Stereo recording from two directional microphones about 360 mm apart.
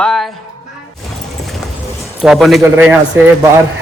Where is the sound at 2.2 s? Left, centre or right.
Centre.